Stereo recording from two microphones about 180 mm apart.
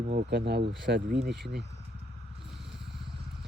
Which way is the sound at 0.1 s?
70° right (ahead or behind).